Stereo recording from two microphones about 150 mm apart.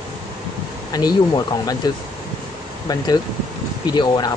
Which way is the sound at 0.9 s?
25° left (ahead or behind).